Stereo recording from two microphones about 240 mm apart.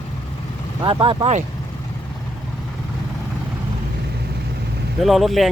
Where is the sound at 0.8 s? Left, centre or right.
Centre.